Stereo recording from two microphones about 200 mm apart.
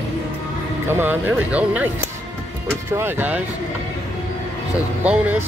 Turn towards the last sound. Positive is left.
turn(degrees=-10)  # may be behind; listen again after turning